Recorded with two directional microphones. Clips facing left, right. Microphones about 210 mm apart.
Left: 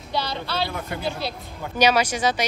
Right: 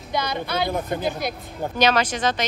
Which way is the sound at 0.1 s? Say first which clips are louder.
Right 2 dB; 15° right (ahead or behind).